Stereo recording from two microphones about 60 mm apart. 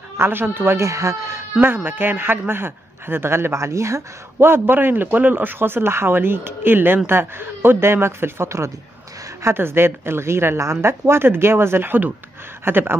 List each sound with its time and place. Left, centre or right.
0.2 s a man's voice: right
0.7 s speech: right
1.6 s a man's voice: right
4.5 s a man's voice: right
9.4 s a woman's voice: right